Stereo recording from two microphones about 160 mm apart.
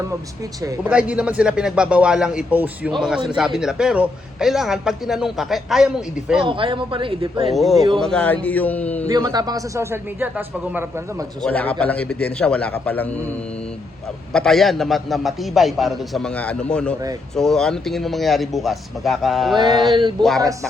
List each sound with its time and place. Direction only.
0.9 s a man's voice: 5° right (ahead or behind)
6.4 s speech: 30° right (ahead or behind)
7.5 s a man's voice: centre (ahead or behind)
9.0 s a man's voice: 25° right (ahead or behind)
11.4 s a man's voice: 10° left (ahead or behind)
14.3 s a man's voice: centre (ahead or behind)
19.9 s a man's voice: 30° right (ahead or behind)